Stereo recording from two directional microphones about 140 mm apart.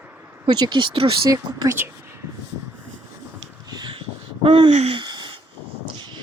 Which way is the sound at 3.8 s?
40° right (ahead or behind).